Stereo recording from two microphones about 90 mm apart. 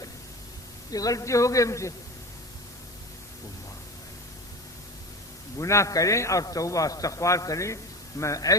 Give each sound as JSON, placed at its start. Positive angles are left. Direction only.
{"t": 0.9, "sound": "a man's voice", "side_deg": 40}
{"t": 5.5, "sound": "a man's voice", "side_deg": 35}